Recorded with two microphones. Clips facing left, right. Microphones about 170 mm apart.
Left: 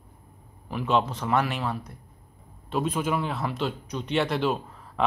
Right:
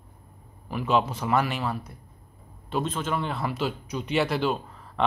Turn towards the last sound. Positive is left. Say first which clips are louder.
# even
turn(degrees=0)  # may be behind; listen again after turning